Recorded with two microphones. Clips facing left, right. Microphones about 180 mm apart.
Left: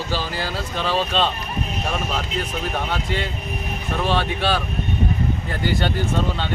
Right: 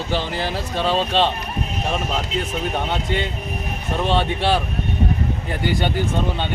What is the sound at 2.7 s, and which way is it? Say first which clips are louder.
A man's voice: right 2 dB; 25° right (ahead or behind).